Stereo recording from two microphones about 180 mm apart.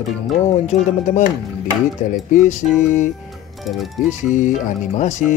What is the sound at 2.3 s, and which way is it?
Speech, 45° left (ahead or behind).